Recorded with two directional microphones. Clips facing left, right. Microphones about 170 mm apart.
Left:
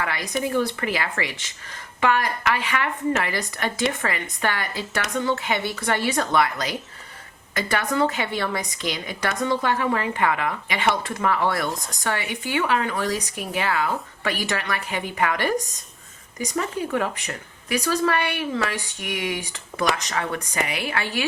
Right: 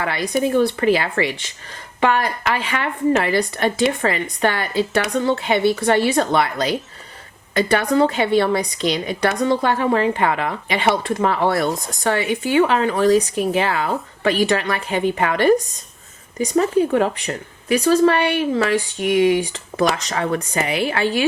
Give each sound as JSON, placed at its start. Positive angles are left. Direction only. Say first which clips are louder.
{"t": 0.0, "sound": "speech", "louder": "right 6 dB", "side_deg": -30}